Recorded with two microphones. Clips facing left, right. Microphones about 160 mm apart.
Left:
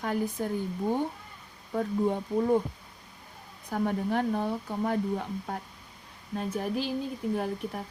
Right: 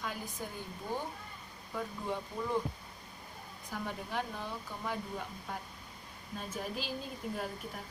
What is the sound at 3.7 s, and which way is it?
A woman's voice, 55° left (ahead or behind).